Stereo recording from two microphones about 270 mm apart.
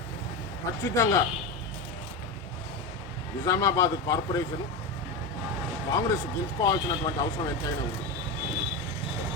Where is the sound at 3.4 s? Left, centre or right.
Centre.